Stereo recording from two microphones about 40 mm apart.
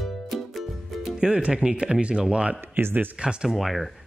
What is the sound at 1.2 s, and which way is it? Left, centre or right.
Speech, right.